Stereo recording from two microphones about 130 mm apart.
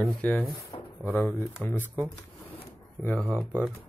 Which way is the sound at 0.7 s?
50° left (ahead or behind).